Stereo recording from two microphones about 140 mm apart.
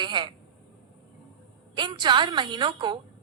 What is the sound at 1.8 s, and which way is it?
A woman's voice, 35° right (ahead or behind).